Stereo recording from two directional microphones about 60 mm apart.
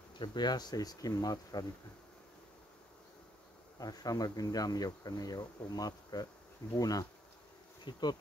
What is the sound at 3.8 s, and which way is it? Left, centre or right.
Speech, left.